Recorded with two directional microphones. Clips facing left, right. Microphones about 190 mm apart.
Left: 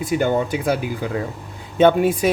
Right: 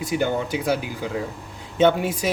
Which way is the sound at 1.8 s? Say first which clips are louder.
Left 4 dB; 55° left (ahead or behind).